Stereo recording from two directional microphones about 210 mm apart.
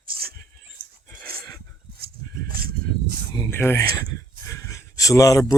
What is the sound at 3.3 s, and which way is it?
Speech, 10° left (ahead or behind).